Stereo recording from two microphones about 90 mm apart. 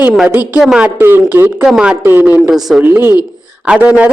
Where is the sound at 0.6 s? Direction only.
10° right (ahead or behind).